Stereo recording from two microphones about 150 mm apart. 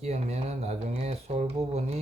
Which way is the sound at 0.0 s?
45° right (ahead or behind).